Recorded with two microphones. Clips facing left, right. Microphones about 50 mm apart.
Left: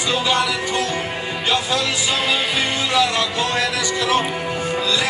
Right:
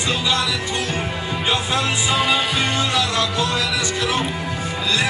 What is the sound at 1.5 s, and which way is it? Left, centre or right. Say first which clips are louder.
Music: left 1 dB; right.